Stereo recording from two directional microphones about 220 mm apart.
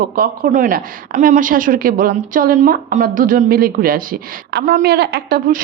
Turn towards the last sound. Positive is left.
turn(degrees=-40)  # may be behind; listen again after turning